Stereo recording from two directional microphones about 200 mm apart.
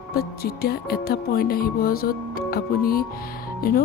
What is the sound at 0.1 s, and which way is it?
Music, 50° left (ahead or behind).